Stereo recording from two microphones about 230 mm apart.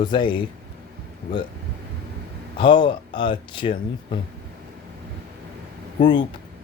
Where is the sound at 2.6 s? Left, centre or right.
Left.